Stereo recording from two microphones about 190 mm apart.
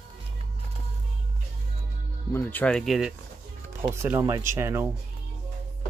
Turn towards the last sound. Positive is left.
turn(degrees=-15)  # may be behind; listen again after turning